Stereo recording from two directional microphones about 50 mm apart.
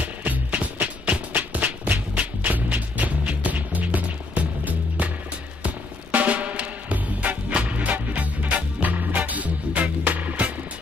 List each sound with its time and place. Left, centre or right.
0.0 s music: right
6.1 s music: right